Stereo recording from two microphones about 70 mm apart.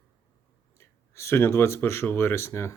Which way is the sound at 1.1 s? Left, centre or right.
Left.